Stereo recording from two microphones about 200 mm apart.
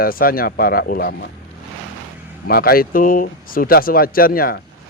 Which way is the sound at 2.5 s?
50° left (ahead or behind).